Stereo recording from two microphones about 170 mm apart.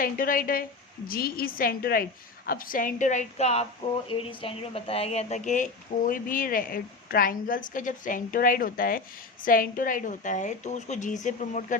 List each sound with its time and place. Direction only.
0.0 s a woman's voice: 55° left (ahead or behind)